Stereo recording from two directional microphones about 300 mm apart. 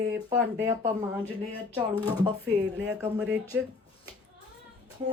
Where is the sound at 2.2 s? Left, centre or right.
Centre.